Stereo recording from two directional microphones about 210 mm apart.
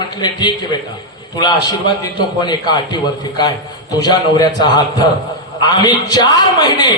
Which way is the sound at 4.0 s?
20° left (ahead or behind).